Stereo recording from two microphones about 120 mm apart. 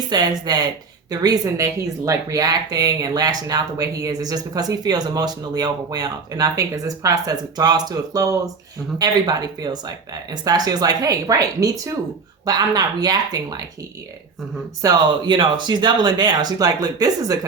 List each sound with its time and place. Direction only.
0.1 s speech: 35° right (ahead or behind)
14.8 s speech: 35° right (ahead or behind)